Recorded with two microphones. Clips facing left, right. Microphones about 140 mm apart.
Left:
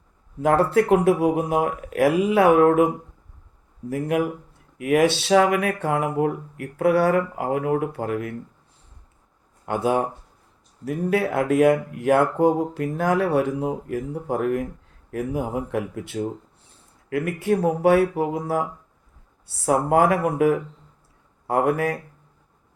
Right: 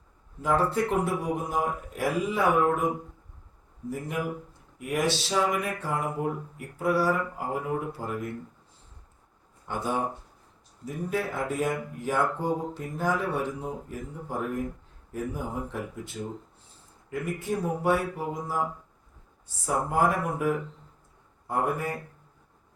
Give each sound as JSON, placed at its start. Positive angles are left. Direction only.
{"t": 0.4, "sound": "speech", "side_deg": 70}
{"t": 4.8, "sound": "speech", "side_deg": 85}
{"t": 9.6, "sound": "speech", "side_deg": 80}